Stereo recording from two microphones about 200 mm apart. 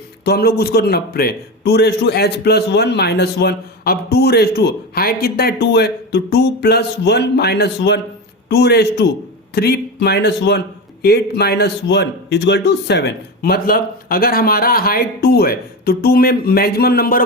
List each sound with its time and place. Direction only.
0.3 s a man's voice: 50° left (ahead or behind)